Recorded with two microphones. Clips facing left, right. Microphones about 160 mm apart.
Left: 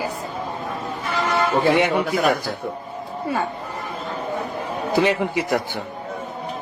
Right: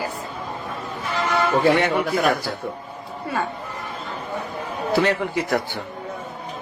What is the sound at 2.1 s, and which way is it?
Speech, 5° left (ahead or behind).